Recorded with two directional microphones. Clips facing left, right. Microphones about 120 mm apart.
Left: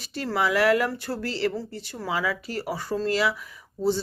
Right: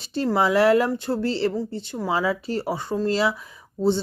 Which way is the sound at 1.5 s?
15° right (ahead or behind).